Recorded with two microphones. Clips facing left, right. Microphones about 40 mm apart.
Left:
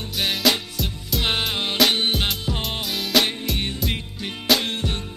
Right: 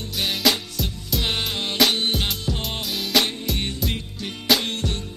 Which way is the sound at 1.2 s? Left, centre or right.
Centre.